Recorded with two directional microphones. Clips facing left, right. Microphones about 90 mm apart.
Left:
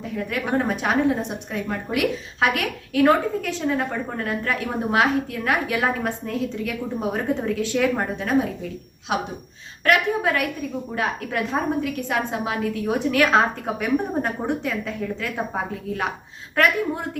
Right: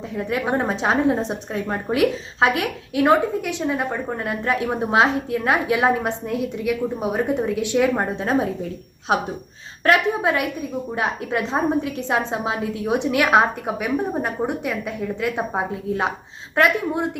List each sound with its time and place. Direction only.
0.2 s a woman's voice: 25° right (ahead or behind)
9.1 s a woman's voice: 40° right (ahead or behind)
9.8 s a woman's voice: 25° right (ahead or behind)